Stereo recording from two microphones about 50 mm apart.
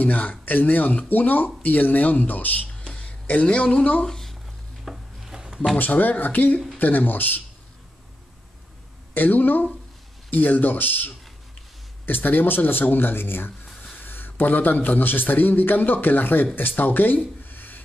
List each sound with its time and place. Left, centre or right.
0.0 s a man's voice: left
2.8 s a sound: left
4.0 s a sound: centre
4.8 s wood: centre
5.8 s a man's voice: left
9.1 s a man's voice: left